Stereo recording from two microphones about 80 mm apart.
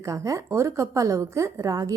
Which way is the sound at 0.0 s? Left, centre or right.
Right.